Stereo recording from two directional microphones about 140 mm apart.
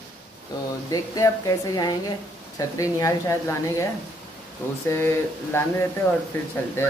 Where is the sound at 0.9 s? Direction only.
25° left (ahead or behind).